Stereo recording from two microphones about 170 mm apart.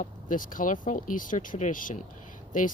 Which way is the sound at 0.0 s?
50° left (ahead or behind).